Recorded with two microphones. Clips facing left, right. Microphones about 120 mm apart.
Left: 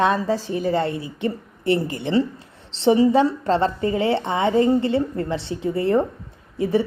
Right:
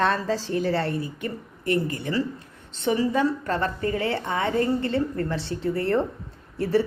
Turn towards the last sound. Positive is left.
turn(degrees=15)  # may be behind; listen again after turning